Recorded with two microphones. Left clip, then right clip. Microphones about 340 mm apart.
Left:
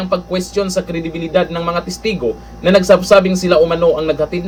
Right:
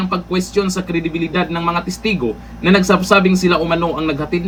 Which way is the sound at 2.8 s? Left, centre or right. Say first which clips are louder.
Left 5 dB; centre.